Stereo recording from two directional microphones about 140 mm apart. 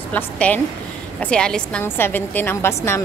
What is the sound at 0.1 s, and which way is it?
A woman's voice, 10° left (ahead or behind).